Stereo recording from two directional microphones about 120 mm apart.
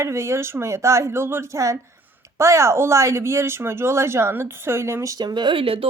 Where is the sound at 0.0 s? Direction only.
25° right (ahead or behind).